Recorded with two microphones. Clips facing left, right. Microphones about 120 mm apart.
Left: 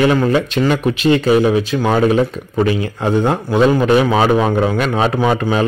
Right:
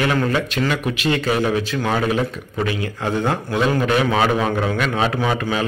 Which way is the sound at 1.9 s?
30° left (ahead or behind).